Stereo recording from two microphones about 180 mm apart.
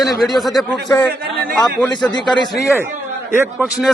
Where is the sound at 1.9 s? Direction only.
25° left (ahead or behind).